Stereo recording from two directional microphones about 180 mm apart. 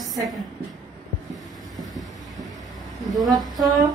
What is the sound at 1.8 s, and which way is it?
Train, centre (ahead or behind).